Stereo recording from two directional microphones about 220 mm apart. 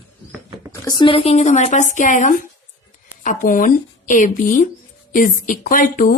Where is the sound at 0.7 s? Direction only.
20° left (ahead or behind).